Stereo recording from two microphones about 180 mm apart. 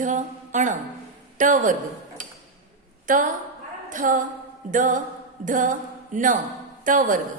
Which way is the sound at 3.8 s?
45° right (ahead or behind).